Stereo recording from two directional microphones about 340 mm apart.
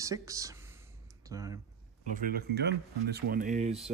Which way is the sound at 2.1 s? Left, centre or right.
Right.